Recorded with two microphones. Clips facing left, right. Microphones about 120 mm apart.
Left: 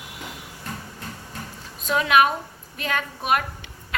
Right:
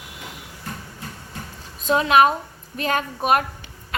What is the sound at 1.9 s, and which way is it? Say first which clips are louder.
A woman's voice: right 3 dB; 35° right (ahead or behind).